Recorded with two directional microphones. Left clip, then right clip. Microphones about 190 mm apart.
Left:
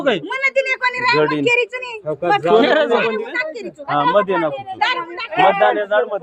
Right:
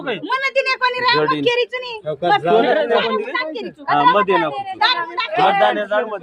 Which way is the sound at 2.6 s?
70° left (ahead or behind).